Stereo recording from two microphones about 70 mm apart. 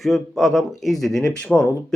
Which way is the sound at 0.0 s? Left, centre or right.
Centre.